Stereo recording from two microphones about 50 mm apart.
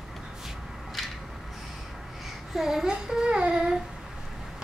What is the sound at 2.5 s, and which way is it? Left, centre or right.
Child singing, centre.